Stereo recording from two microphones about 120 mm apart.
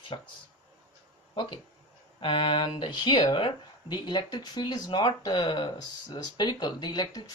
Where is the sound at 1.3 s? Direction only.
45° left (ahead or behind).